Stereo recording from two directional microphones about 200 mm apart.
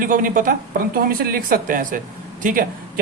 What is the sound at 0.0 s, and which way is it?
Speech, 45° right (ahead or behind).